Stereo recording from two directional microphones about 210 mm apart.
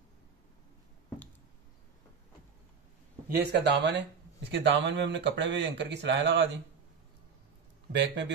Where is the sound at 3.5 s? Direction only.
55° right (ahead or behind).